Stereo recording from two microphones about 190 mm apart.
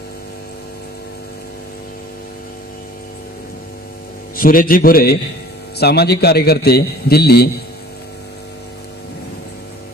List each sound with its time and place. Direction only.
4.4 s a man's voice: 50° left (ahead or behind)